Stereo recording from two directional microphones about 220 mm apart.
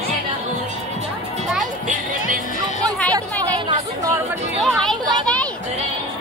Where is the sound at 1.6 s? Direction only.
35° right (ahead or behind).